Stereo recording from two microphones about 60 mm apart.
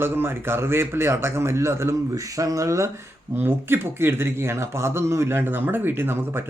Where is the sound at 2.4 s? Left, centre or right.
Right.